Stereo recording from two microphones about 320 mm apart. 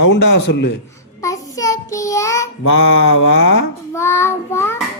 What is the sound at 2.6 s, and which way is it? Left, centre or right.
A man's voice, left.